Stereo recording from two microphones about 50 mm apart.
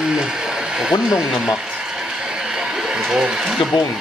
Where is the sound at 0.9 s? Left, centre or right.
Centre.